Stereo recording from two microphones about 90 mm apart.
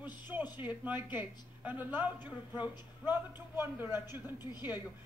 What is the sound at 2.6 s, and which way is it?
A woman's voice, 20° right (ahead or behind).